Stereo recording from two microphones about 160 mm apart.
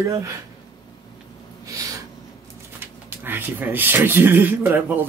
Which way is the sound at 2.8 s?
15° right (ahead or behind).